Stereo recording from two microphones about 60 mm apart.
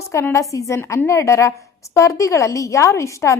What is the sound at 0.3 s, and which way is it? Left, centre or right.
A woman's voice, left.